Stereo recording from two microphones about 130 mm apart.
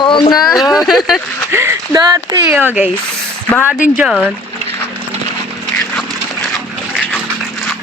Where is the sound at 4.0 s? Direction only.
Centre (ahead or behind).